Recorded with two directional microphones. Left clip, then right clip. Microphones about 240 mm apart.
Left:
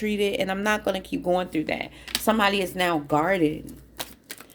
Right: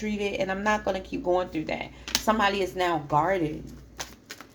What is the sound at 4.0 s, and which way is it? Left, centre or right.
Typewriter, left.